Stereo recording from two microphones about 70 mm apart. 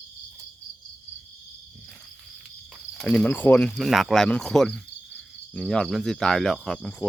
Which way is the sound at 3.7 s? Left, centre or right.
Centre.